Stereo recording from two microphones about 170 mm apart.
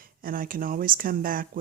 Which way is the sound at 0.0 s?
55° right (ahead or behind).